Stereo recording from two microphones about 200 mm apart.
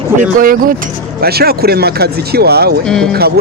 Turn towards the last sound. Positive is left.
turn(degrees=-50)  # may be behind; listen again after turning